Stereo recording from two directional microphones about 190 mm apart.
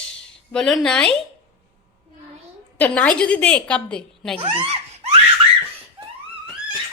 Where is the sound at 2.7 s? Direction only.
10° left (ahead or behind).